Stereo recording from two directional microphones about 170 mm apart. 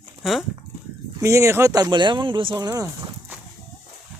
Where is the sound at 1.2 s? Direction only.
15° right (ahead or behind).